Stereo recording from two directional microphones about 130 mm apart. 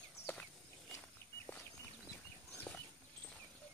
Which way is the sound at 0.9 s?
20° left (ahead or behind).